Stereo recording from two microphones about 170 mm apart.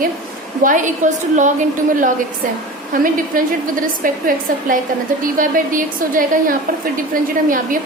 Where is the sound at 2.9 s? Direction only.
55° right (ahead or behind).